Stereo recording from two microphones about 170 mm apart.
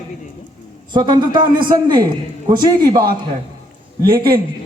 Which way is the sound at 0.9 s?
25° right (ahead or behind).